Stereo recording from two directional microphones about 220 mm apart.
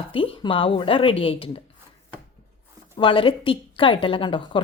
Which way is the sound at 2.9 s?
20° left (ahead or behind).